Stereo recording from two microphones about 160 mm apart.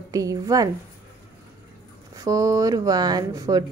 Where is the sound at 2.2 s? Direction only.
20° right (ahead or behind).